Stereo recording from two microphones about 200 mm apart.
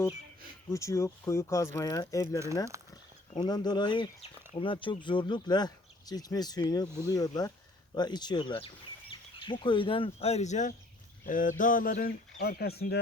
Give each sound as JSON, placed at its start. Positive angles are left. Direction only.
{"t": 0.7, "sound": "speech", "side_deg": 15}